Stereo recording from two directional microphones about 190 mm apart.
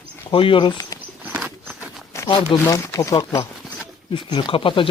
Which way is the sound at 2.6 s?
15° left (ahead or behind).